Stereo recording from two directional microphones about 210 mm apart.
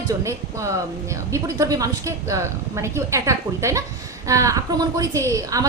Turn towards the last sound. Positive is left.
turn(degrees=-15)  # may be behind; listen again after turning